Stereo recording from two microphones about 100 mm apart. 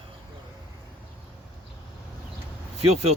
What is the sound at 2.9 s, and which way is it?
Speech, 90° right.